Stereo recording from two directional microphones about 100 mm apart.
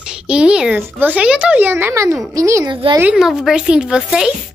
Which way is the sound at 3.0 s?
5° right (ahead or behind).